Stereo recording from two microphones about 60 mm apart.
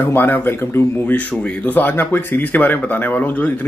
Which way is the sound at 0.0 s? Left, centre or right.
Left.